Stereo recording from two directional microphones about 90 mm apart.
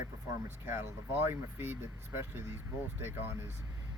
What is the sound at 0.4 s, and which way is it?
Speech, 25° right (ahead or behind).